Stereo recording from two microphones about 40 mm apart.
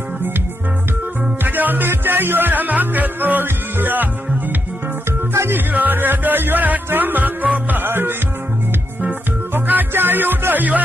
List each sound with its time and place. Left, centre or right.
1.4 s music: right
7.8 s music: right
9.5 s music: right